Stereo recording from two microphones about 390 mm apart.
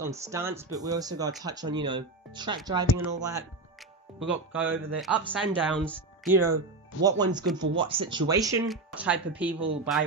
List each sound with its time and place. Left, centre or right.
0.0 s speech: centre
7.0 s speech: centre